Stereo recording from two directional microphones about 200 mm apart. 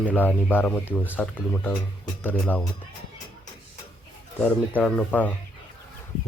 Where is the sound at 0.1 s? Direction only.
10° left (ahead or behind).